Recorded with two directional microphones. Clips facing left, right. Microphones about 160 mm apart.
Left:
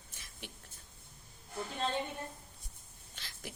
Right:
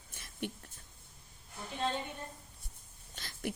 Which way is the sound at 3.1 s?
50° right (ahead or behind).